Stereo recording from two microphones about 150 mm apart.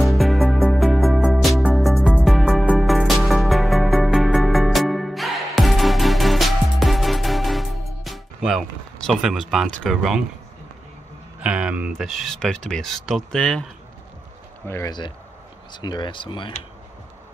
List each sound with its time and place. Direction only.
0.0 s music: centre (ahead or behind)
11.4 s speech: 10° right (ahead or behind)
14.7 s speech: 25° left (ahead or behind)